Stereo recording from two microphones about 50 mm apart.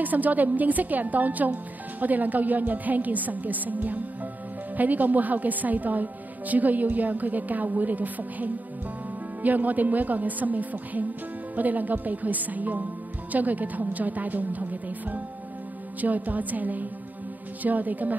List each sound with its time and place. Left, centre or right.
0.0 s a woman's voice: right